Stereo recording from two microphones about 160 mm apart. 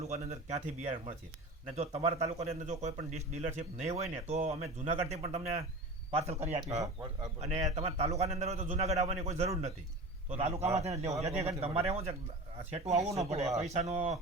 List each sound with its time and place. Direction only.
0.1 s a man's voice: 40° right (ahead or behind)